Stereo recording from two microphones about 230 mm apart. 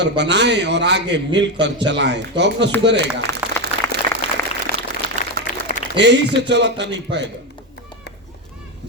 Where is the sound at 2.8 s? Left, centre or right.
Right.